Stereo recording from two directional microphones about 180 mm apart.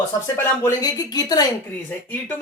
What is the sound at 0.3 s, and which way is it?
Speech, 20° left (ahead or behind).